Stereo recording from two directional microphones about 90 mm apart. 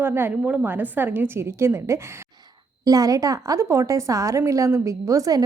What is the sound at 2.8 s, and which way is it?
A woman's voice, 45° right (ahead or behind).